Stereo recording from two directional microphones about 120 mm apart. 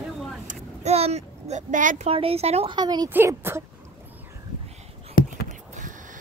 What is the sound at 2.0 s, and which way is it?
Speech, 55° right (ahead or behind).